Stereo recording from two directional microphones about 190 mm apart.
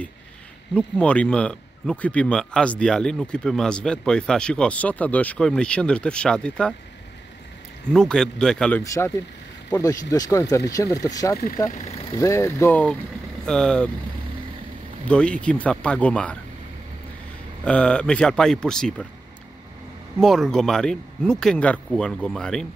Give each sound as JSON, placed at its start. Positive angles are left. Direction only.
{"t": 0.7, "sound": "speech", "side_deg": 5}
{"t": 7.9, "sound": "speech", "side_deg": 5}
{"t": 15.0, "sound": "speech", "side_deg": 5}
{"t": 17.6, "sound": "speech", "side_deg": 5}
{"t": 20.2, "sound": "speech", "side_deg": 0}